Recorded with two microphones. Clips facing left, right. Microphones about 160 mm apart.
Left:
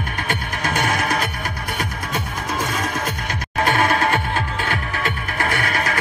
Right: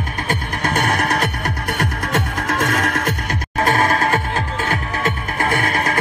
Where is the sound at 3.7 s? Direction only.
40° right (ahead or behind).